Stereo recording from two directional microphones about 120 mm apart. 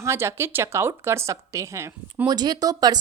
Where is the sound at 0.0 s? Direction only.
20° right (ahead or behind).